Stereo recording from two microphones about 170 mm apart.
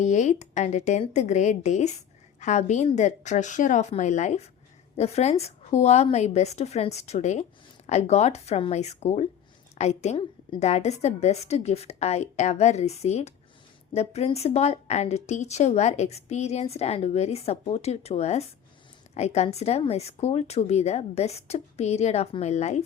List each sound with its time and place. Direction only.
0.0 s a woman's voice: 45° left (ahead or behind)